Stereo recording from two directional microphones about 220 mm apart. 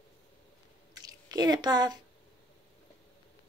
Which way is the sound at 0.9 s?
15° right (ahead or behind).